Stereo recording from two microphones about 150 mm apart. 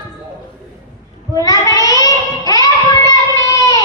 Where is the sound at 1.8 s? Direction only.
25° left (ahead or behind).